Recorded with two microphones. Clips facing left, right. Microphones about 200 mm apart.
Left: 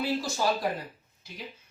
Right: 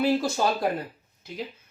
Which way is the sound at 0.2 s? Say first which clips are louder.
Right 5 dB; 55° right (ahead or behind).